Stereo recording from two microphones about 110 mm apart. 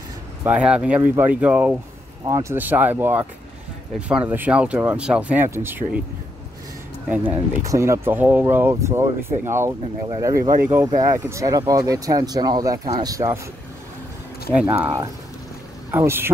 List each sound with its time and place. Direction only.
0.4 s speech: 15° right (ahead or behind)
2.2 s speech: 30° right (ahead or behind)
2.5 s speech: 15° right (ahead or behind)
7.6 s speech: 30° right (ahead or behind)
14.5 s speech: 10° right (ahead or behind)
15.9 s speech: 20° right (ahead or behind)